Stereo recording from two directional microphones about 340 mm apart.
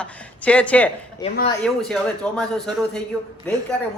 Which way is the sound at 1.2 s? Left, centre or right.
Centre.